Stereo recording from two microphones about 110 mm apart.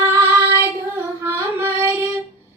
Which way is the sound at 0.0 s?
20° right (ahead or behind).